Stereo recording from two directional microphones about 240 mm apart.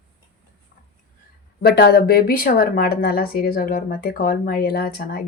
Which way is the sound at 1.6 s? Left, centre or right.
Left.